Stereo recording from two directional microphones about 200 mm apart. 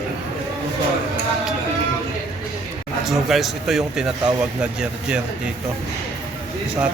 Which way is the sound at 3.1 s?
Centre (ahead or behind).